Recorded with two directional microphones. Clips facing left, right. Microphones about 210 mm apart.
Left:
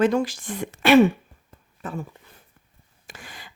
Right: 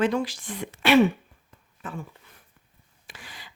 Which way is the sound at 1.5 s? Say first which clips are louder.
Left 4 dB; 40° left (ahead or behind).